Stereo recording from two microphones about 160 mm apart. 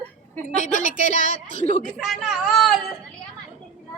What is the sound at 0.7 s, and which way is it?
Speech, 50° left (ahead or behind).